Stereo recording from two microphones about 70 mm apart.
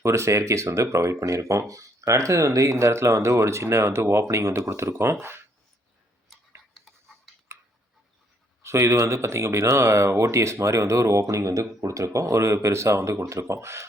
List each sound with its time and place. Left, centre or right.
0.0 s speech: right
7.5 s a sound: right
8.6 s speech: right